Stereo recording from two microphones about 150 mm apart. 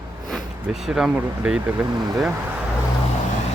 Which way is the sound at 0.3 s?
Centre (ahead or behind).